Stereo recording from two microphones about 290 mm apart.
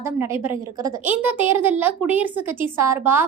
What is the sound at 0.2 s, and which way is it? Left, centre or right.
A woman's voice, centre.